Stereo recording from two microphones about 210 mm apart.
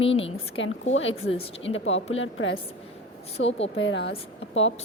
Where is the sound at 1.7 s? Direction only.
65° left (ahead or behind).